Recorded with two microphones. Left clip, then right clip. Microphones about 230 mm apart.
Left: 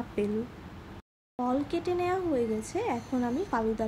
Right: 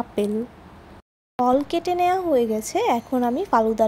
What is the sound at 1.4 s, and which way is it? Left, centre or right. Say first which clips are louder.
A woman's voice: right 10 dB; right.